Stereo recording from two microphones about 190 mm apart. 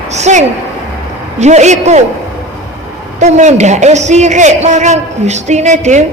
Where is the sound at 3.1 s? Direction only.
40° right (ahead or behind).